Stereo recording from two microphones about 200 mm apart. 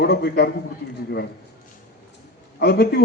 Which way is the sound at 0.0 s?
55° left (ahead or behind).